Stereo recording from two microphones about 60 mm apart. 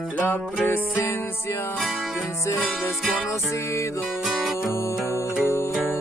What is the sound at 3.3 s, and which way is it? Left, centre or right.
Music, left.